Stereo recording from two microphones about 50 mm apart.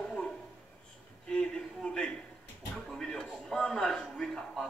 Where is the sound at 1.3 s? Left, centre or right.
Centre.